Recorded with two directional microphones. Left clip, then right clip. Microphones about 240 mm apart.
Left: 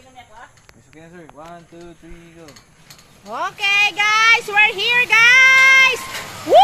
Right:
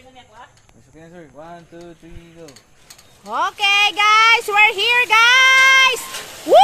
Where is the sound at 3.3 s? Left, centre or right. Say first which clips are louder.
Right 2 dB; centre.